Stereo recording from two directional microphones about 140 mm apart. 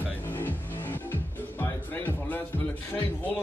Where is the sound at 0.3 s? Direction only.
15° left (ahead or behind).